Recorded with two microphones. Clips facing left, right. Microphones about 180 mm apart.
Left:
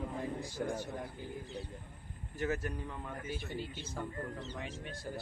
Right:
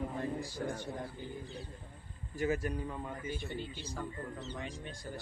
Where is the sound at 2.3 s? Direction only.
10° right (ahead or behind).